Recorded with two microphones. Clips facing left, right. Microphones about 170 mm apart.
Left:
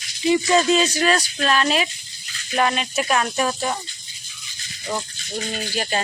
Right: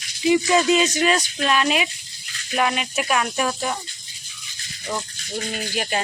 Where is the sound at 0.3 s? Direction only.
15° right (ahead or behind).